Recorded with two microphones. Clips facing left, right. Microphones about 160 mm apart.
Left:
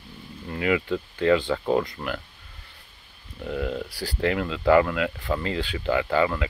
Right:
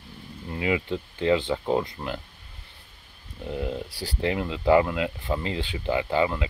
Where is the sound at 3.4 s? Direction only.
20° right (ahead or behind).